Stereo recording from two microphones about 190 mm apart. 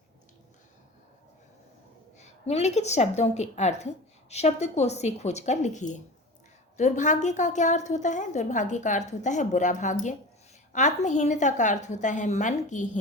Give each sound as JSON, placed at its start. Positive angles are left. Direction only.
{"t": 2.1, "sound": "a woman's voice", "side_deg": 35}